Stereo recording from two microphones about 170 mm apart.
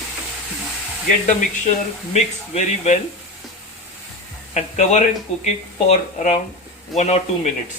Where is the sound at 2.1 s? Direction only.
45° left (ahead or behind).